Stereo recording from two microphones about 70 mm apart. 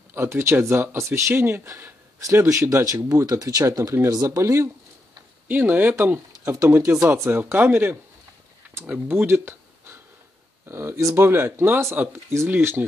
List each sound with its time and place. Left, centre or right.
0.1 s speech: right
2.8 s speech: right
4.1 s speech: right
5.5 s speech: right
8.6 s a sound: right
9.0 s speech: right